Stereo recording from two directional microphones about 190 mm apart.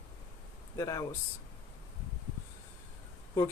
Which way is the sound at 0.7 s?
20° left (ahead or behind).